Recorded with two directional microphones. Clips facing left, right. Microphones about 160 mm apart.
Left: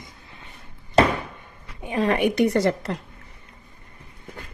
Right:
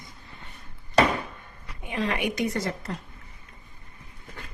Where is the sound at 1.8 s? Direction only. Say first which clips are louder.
Left 7 dB; 45° left (ahead or behind); by 2.9 s 75° left (ahead or behind).